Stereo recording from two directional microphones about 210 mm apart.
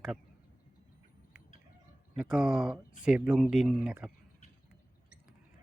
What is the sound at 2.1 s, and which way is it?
Speech, 5° right (ahead or behind).